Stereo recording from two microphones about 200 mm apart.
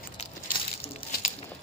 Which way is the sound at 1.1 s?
50° left (ahead or behind).